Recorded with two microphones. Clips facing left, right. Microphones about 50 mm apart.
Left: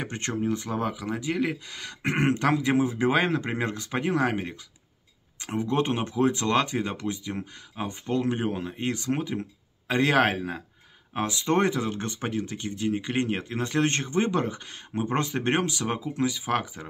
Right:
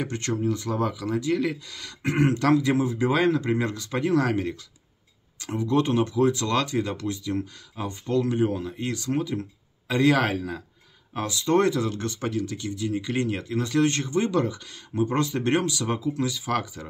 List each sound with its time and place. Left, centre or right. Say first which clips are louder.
0.0 s speech: right 2 dB; left